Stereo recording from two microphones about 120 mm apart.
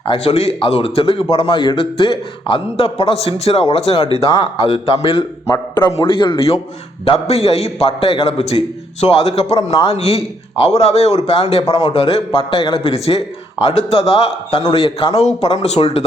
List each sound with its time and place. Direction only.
0.1 s a man's voice: 55° left (ahead or behind)
15.4 s a man's voice: 65° left (ahead or behind)